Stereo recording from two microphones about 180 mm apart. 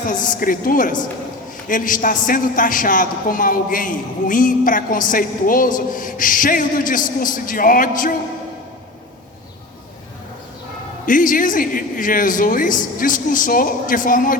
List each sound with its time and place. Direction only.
0.1 s a man's voice: 45° left (ahead or behind)
11.0 s a man's voice: 45° left (ahead or behind)